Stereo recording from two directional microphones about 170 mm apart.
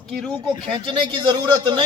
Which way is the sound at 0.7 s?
30° right (ahead or behind).